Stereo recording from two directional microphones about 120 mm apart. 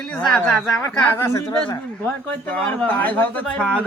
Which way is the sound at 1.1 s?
25° left (ahead or behind).